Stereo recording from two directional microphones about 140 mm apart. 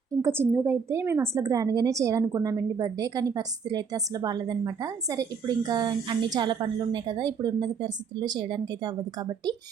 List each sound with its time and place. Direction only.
0.1 s a woman's voice: 20° right (ahead or behind)